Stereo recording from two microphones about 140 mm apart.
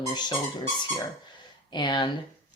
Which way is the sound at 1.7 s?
35° left (ahead or behind).